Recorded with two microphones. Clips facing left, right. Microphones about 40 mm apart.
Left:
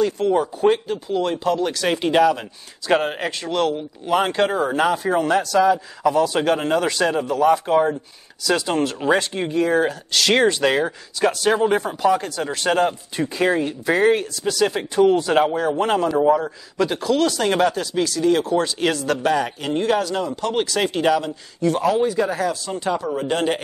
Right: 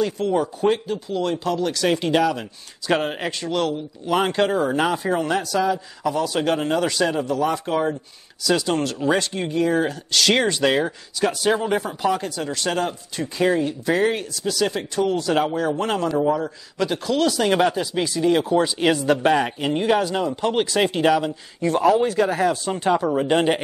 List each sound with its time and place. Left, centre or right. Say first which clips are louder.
0.0 s speech: left 2 dB; centre
12.4 s speech: left 5 dB; centre
16.7 s speech: left 3 dB; centre; by 19.7 s right
19.7 s speech: left 1 dB; centre
22.4 s speech: right 2 dB; right